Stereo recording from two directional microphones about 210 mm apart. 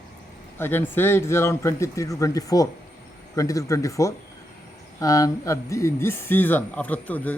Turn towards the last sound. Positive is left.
turn(degrees=10)  # may be behind; listen again after turning